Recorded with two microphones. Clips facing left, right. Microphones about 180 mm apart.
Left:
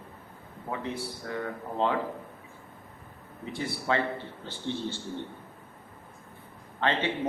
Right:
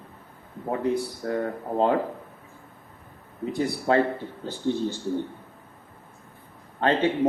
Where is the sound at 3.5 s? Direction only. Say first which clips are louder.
Right 7 dB; 45° right (ahead or behind).